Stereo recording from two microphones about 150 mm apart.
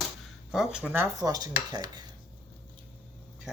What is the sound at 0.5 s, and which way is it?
Speech, 5° right (ahead or behind).